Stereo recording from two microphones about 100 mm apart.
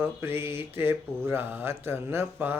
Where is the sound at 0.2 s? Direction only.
25° right (ahead or behind).